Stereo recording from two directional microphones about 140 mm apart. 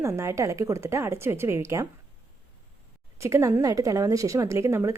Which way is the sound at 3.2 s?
20° right (ahead or behind).